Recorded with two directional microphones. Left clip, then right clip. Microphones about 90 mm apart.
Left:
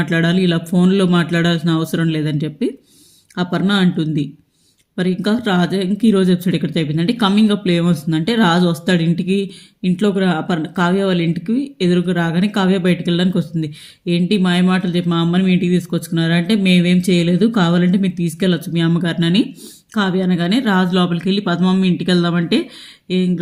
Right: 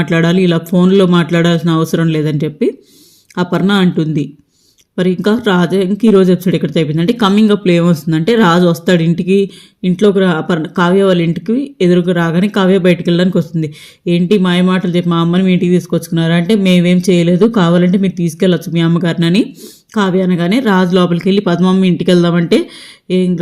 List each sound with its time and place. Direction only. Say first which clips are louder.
0.0 s speech: right 5 dB; 45° right (ahead or behind)
21.9 s speech: right 6 dB; 55° right (ahead or behind)